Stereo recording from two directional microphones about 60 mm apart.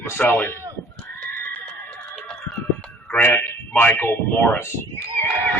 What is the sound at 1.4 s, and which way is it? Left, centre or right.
Music, left.